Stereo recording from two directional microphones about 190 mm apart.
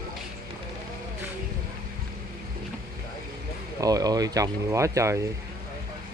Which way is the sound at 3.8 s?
20° right (ahead or behind).